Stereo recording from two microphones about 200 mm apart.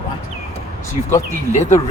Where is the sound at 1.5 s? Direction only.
35° left (ahead or behind).